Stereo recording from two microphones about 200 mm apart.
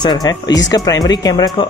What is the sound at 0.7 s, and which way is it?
Speech, 20° left (ahead or behind).